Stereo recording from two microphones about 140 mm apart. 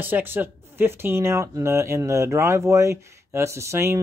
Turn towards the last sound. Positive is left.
turn(degrees=-20)  # may be behind; listen again after turning